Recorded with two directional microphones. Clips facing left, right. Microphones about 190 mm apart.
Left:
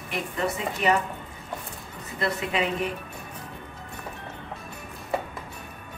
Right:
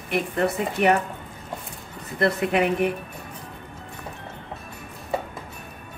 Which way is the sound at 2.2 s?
60° right (ahead or behind).